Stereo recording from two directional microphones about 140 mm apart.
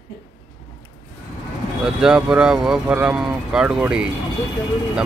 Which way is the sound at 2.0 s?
5° right (ahead or behind).